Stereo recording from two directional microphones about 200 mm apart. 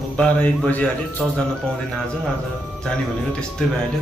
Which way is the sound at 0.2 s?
5° left (ahead or behind).